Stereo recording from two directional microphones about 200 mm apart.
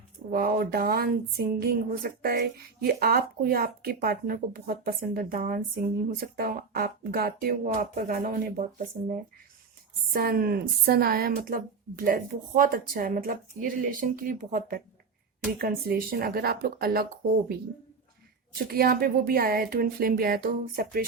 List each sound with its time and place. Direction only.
0.3 s speech: 45° right (ahead or behind)
10.1 s speech: 45° right (ahead or behind)
18.5 s speech: 50° right (ahead or behind)